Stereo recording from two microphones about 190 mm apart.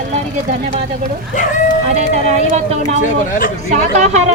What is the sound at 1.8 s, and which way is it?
Speech, 35° right (ahead or behind).